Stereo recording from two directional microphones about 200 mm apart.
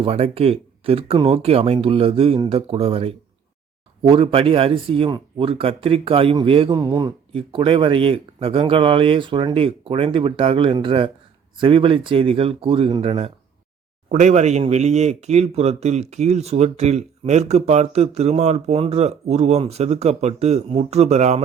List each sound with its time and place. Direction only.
0.0 s speech: 30° right (ahead or behind)